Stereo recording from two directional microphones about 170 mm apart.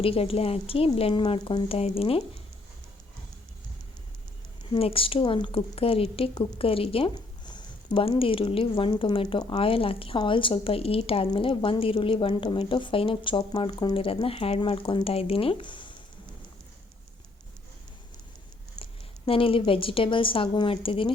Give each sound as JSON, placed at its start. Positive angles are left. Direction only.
{"t": 0.0, "sound": "a woman's voice", "side_deg": 35}
{"t": 4.7, "sound": "a woman's voice", "side_deg": 35}
{"t": 18.8, "sound": "speech", "side_deg": 30}